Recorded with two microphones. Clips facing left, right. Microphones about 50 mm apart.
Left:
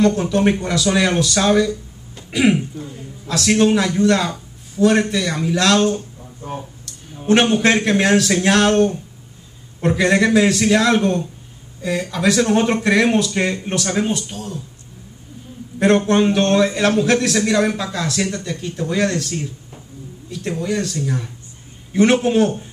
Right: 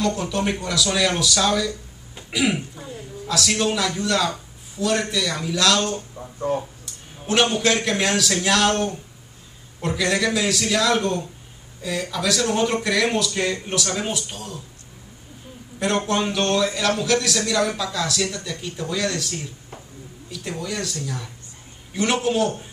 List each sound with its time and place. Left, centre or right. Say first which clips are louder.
0.0 s speech: left 7 dB; left
3.3 s a man's voice: left 7 dB; left
7.2 s speech: left 5 dB; left
16.1 s a man's voice: left 6 dB; left